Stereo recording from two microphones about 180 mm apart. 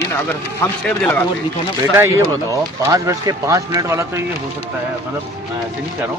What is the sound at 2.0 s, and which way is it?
Speech, 15° right (ahead or behind).